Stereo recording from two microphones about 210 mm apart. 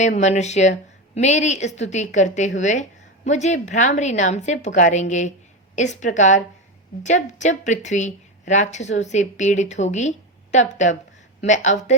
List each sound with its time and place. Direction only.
0.0 s a woman's voice: 35° left (ahead or behind)